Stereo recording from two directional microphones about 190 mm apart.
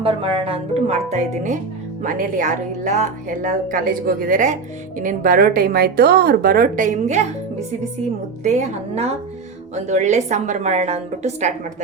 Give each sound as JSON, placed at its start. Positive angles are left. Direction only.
{"t": 0.0, "sound": "a woman's voice", "side_deg": -30}
{"t": 8.4, "sound": "a woman's voice", "side_deg": -35}